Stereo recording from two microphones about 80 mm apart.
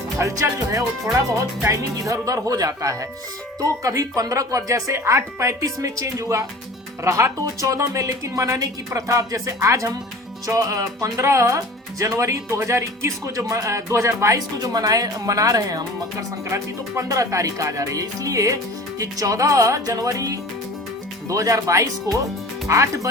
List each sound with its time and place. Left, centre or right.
0.2 s speech: right